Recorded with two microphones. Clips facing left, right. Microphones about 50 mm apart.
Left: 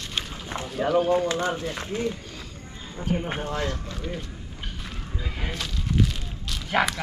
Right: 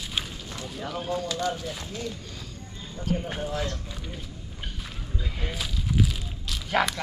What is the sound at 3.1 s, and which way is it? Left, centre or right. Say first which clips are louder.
Speech: left 2 dB; left.